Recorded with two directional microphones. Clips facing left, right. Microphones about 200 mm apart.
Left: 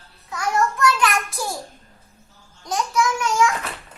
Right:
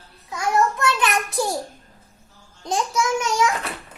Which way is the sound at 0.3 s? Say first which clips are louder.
Right 1 dB; 20° right (ahead or behind).